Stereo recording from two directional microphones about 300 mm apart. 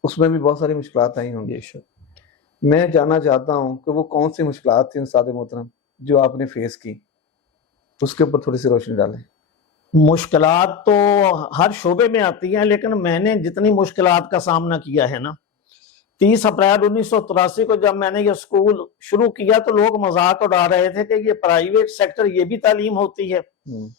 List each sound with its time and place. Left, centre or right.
0.0 s a man's voice: centre
3.5 s a man's voice: centre
7.9 s a man's voice: centre